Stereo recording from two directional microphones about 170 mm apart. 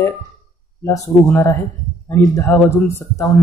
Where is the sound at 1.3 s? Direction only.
15° left (ahead or behind).